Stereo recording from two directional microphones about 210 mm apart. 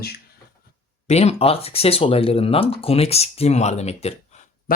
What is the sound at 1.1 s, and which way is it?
Speech, 30° left (ahead or behind).